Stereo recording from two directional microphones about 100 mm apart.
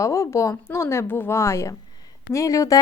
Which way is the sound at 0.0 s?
30° left (ahead or behind).